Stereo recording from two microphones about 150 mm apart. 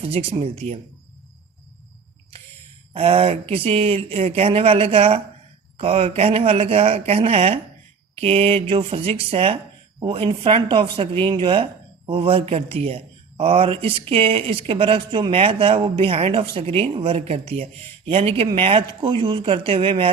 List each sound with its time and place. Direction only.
0.0 s speech: 40° right (ahead or behind)
2.9 s speech: 40° right (ahead or behind)